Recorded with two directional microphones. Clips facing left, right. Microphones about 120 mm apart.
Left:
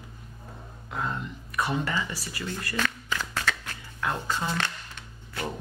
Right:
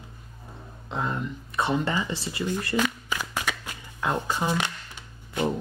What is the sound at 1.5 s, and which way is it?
Shuffling cards, 25° right (ahead or behind).